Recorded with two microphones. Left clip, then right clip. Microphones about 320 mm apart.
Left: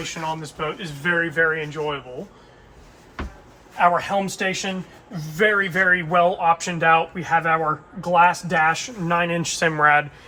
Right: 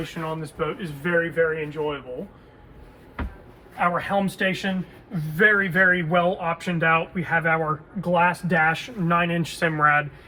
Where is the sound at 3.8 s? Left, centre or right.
Left.